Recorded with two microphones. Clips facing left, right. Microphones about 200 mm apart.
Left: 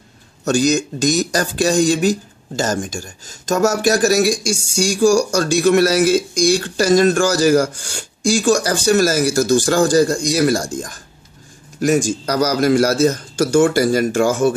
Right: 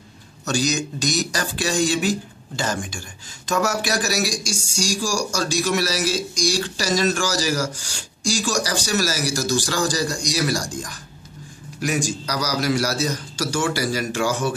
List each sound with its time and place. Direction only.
0.5 s speech: 50° left (ahead or behind)